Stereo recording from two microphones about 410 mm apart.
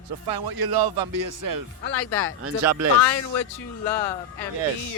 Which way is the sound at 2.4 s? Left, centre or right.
Right.